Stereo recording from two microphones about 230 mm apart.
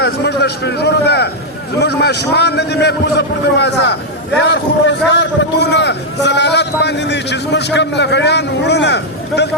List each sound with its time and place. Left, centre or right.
0.0 s a man's voice: left